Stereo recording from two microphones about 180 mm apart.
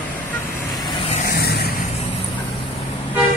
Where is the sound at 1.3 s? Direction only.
60° left (ahead or behind).